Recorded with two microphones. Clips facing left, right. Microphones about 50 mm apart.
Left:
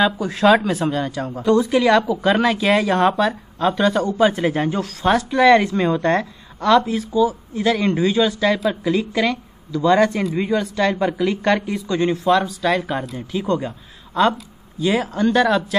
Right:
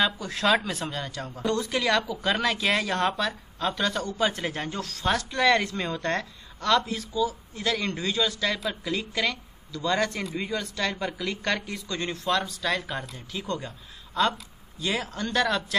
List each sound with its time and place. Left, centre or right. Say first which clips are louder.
0.0 s speech: left 9 dB; centre